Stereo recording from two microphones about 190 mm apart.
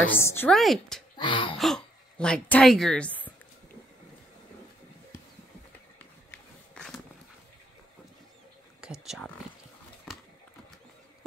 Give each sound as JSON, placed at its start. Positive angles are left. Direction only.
{"t": 0.2, "sound": "speech", "side_deg": 10}
{"t": 0.6, "sound": "speech", "side_deg": 0}
{"t": 1.1, "sound": "a sound", "side_deg": 25}
{"t": 1.6, "sound": "a woman's voice", "side_deg": 5}
{"t": 6.3, "sound": "a sound", "side_deg": 5}
{"t": 8.8, "sound": "speech", "side_deg": 0}